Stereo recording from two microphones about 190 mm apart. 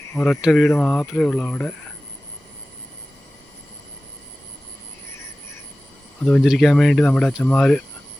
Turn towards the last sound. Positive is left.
turn(degrees=5)  # may be behind; listen again after turning